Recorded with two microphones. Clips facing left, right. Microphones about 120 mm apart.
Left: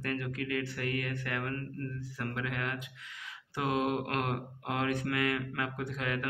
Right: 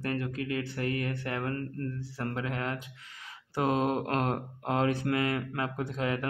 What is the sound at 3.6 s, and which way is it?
Speech, 35° right (ahead or behind).